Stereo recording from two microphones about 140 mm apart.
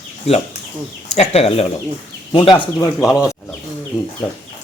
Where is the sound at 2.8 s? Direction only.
25° left (ahead or behind).